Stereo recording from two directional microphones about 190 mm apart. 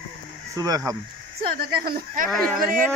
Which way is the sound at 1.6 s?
50° right (ahead or behind).